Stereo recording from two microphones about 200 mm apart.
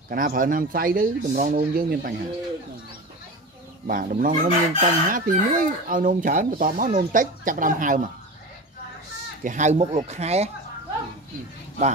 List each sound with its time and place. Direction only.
0.1 s chicken: 45° right (ahead or behind)
3.8 s chicken: 45° right (ahead or behind)
9.4 s speech: 40° right (ahead or behind)